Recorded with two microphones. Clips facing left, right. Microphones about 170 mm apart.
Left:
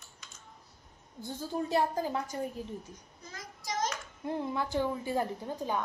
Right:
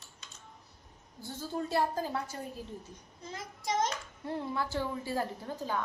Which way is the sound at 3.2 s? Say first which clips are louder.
Right 6 dB; 25° right (ahead or behind).